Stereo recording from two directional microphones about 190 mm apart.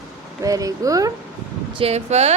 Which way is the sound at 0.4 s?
20° right (ahead or behind).